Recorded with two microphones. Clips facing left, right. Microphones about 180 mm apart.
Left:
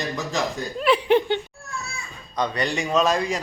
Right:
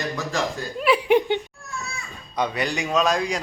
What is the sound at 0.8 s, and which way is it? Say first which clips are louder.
A woman's voice: even; 10° right (ahead or behind).